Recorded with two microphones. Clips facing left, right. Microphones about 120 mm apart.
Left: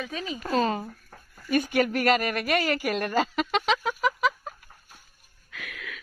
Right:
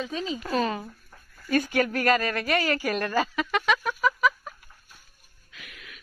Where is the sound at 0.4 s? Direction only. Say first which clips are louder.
Left 4 dB; 35° left (ahead or behind).